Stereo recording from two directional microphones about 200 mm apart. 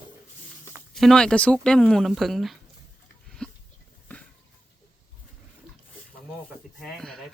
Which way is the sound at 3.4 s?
5° left (ahead or behind).